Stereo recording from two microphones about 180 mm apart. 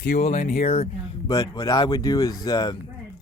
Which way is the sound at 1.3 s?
20° left (ahead or behind).